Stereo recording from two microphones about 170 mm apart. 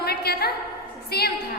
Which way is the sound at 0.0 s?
70° left (ahead or behind).